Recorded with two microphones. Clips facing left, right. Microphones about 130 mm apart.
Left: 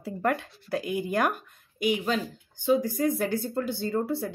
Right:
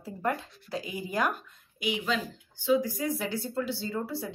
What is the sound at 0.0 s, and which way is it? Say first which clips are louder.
Speech: left 4 dB; 65° left (ahead or behind).